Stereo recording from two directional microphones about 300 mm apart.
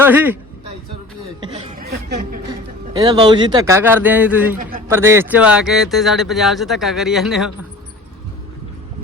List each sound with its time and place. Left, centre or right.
0.0 s a man's voice: centre
1.8 s a sound: right
2.5 s speech: centre